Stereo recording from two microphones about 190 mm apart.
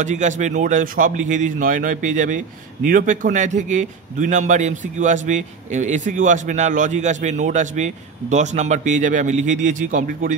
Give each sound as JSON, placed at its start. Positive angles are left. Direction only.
{"t": 0.0, "sound": "a man's voice", "side_deg": -40}